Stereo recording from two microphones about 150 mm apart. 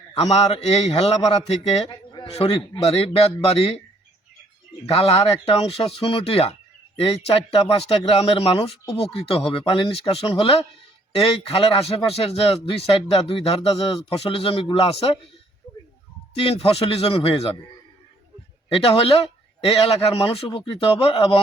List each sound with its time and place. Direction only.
0.2 s a man's voice: 45° left (ahead or behind)
4.9 s speech: 40° left (ahead or behind)
15.6 s a sound: 15° left (ahead or behind)
16.3 s speech: 40° left (ahead or behind)
18.7 s speech: 40° left (ahead or behind)